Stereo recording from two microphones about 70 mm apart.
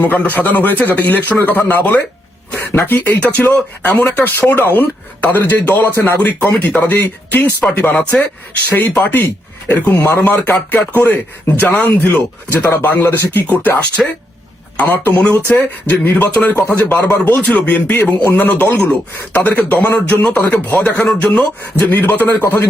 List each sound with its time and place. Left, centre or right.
0.0 s speech: left
7.6 s speech: centre
8.7 s speech: left
10.0 s speech: left
16.6 s speech: left
21.0 s speech: centre
21.3 s speech: left